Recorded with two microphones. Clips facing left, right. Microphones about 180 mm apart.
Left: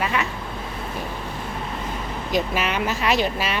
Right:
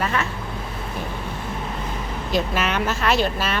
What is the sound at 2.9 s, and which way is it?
Speech, 15° left (ahead or behind).